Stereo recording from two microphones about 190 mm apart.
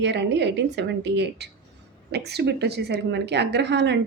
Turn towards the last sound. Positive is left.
turn(degrees=-65)  # may be behind; listen again after turning